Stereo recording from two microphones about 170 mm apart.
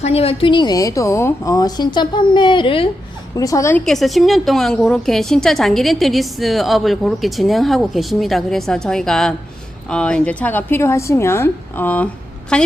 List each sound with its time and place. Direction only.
0.0 s a woman's voice: 35° left (ahead or behind)
3.3 s a woman's voice: 20° left (ahead or behind)
3.8 s a woman's voice: centre (ahead or behind)